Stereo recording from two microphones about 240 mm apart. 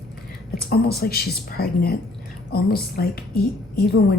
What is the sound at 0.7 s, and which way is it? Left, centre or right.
A woman's voice, left.